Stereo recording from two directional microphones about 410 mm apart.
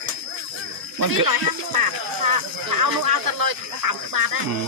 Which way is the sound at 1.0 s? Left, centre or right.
Right.